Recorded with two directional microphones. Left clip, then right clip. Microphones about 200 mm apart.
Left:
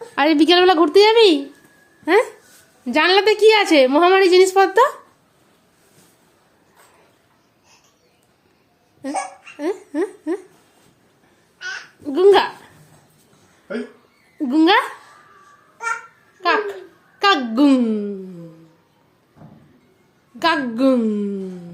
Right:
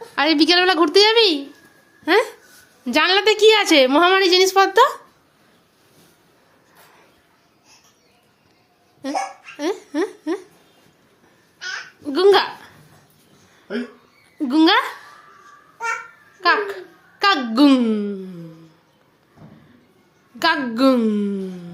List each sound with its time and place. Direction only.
0.2 s a woman's voice: 25° left (ahead or behind)
2.8 s a woman's voice: centre (ahead or behind)
9.6 s speech: 10° left (ahead or behind)
12.0 s a woman's voice: 10° left (ahead or behind)
14.3 s a woman's voice: 10° left (ahead or behind)
16.4 s a child's voice: centre (ahead or behind)
20.4 s a woman's voice: centre (ahead or behind)